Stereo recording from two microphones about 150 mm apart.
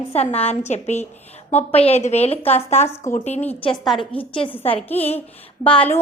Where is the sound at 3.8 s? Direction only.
Centre (ahead or behind).